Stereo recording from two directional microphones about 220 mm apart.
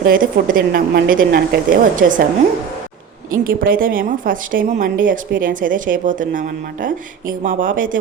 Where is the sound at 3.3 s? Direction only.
40° right (ahead or behind).